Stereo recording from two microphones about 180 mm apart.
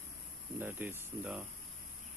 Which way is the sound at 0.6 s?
10° right (ahead or behind).